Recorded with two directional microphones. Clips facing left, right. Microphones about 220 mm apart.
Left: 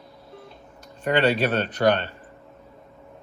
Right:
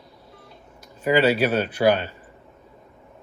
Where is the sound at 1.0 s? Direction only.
5° right (ahead or behind).